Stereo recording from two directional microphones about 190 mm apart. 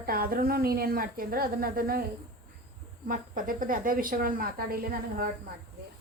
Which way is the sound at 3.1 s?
45° right (ahead or behind).